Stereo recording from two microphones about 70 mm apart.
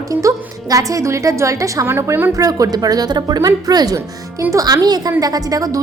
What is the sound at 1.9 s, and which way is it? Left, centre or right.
Speech, right.